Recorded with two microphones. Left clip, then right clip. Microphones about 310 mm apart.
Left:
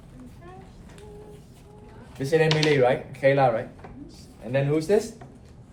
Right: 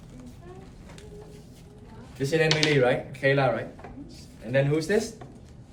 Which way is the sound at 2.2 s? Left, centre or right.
Left.